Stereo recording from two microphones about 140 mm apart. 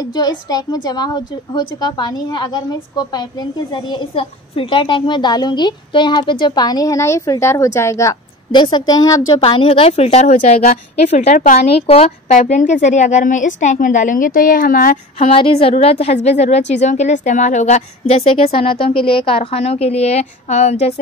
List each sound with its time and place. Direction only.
0.0 s a woman's voice: 30° left (ahead or behind)
9.4 s speech: 40° left (ahead or behind)
12.3 s a woman's voice: 65° left (ahead or behind); by 15.0 s 80° left
15.1 s a woman's voice: 40° left (ahead or behind)